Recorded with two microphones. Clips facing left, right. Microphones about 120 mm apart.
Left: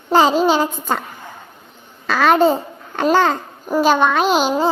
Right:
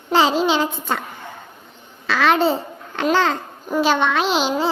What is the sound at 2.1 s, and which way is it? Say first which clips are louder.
A child's voice: left 3 dB; 45° left (ahead or behind).